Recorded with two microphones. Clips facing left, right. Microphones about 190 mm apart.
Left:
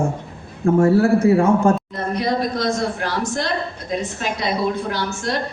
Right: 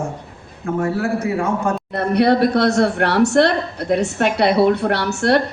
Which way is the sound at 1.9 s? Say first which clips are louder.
Right 6 dB; 65° right (ahead or behind).